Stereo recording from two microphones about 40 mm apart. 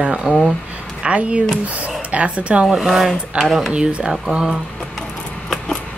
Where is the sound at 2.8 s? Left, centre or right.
Centre.